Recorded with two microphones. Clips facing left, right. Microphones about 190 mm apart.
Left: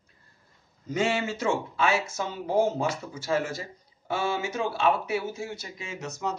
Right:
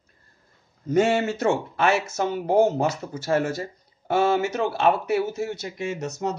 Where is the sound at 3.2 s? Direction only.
55° right (ahead or behind).